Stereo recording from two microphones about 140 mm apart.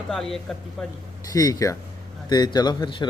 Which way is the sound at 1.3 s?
25° left (ahead or behind).